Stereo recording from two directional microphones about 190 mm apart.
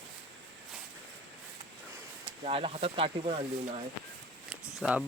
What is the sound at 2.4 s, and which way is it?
Speech, 30° right (ahead or behind).